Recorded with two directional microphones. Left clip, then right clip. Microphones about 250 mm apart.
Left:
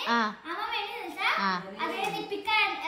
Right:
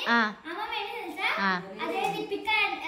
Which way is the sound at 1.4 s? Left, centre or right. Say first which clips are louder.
Right 1 dB; centre.